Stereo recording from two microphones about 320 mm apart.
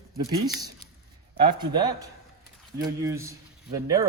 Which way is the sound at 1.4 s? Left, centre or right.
Centre.